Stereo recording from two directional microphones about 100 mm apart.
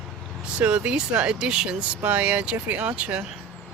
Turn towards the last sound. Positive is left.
turn(degrees=-15)  # may be behind; listen again after turning